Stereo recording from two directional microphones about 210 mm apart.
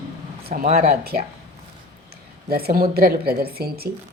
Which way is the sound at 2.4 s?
45° right (ahead or behind).